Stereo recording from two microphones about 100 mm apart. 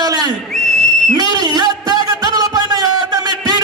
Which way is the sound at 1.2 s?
45° right (ahead or behind).